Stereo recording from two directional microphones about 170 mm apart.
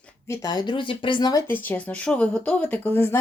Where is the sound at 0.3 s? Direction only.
20° left (ahead or behind).